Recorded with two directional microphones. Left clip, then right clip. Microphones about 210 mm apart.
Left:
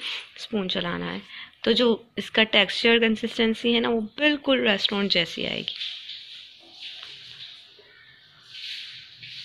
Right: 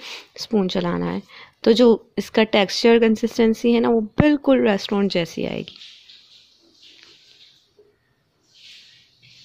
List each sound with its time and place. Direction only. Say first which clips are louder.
0.0 s speech: left 1 dB; 50° right (ahead or behind)